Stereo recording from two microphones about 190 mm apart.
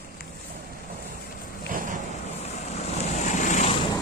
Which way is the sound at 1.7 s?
45° right (ahead or behind).